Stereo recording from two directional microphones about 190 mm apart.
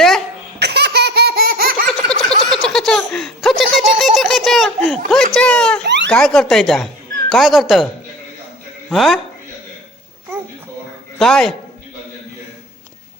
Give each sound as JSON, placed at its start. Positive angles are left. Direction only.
{"t": 0.6, "sound": "laughter", "side_deg": -60}
{"t": 2.0, "sound": "snicker", "side_deg": 0}
{"t": 3.6, "sound": "a sound", "side_deg": 0}
{"t": 5.8, "sound": "a sound", "side_deg": -65}
{"t": 6.1, "sound": "speech", "side_deg": 5}
{"t": 8.9, "sound": "a man's voice", "side_deg": 0}
{"t": 11.2, "sound": "a man's voice", "side_deg": 0}